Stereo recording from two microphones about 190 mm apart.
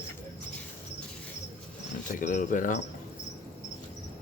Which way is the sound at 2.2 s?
45° left (ahead or behind).